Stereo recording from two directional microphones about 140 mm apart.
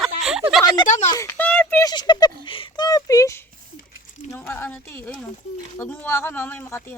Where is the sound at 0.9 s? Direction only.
60° left (ahead or behind).